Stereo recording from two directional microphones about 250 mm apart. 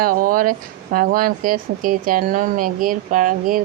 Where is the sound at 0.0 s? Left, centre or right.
Right.